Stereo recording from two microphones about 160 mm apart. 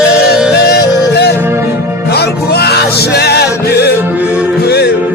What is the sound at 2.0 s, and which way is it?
Music, 90° left.